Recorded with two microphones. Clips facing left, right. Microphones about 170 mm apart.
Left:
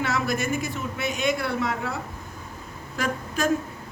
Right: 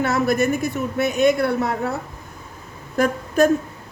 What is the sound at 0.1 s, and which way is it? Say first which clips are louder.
A man's voice: right 7 dB; 55° right (ahead or behind).